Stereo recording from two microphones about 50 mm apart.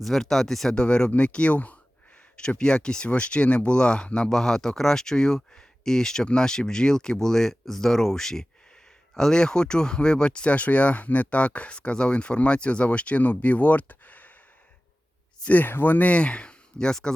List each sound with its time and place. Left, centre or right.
0.0 s speech: centre
0.8 s speech: centre
2.3 s speech: centre; by 14.3 s left
15.4 s speech: left; by 17.2 s centre